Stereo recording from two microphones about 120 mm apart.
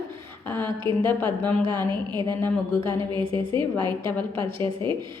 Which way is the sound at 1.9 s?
40° right (ahead or behind).